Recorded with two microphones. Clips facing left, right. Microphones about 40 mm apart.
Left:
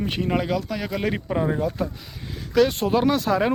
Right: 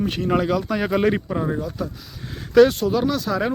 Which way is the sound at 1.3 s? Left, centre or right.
Centre.